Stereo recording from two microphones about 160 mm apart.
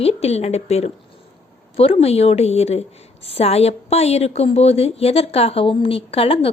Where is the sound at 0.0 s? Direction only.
40° left (ahead or behind).